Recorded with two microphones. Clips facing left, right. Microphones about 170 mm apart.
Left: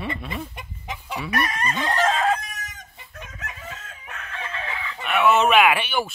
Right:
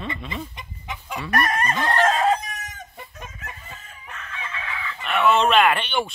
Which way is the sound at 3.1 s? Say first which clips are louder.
Even; 75° left (ahead or behind).